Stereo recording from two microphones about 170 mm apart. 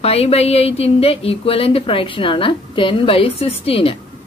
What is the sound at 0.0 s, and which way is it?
Speech, 35° left (ahead or behind).